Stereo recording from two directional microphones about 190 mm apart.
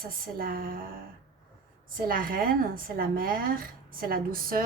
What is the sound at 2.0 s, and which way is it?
Speech, 50° right (ahead or behind).